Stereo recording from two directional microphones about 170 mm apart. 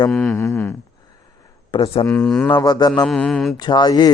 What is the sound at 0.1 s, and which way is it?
Mantra, centre (ahead or behind).